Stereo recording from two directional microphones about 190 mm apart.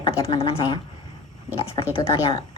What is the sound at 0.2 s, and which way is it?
Speech, 30° left (ahead or behind).